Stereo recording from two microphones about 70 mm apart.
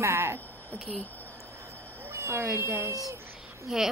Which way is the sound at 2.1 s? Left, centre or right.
Right.